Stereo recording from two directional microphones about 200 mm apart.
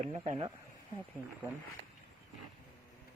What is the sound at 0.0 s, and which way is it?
Speech, 35° right (ahead or behind).